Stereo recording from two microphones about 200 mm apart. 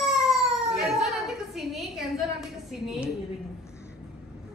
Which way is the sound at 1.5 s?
Centre (ahead or behind).